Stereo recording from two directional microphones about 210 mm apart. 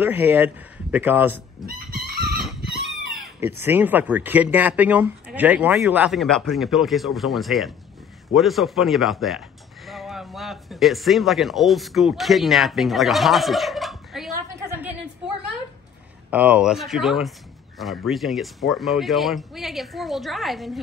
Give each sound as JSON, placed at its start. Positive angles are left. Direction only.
{"t": 0.0, "sound": "speech", "side_deg": -10}
{"t": 1.7, "sound": "chicken", "side_deg": -45}
{"t": 3.3, "sound": "speech", "side_deg": -10}
{"t": 16.3, "sound": "speech", "side_deg": -5}